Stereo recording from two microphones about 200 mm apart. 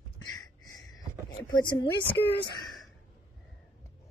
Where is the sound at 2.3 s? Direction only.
55° left (ahead or behind).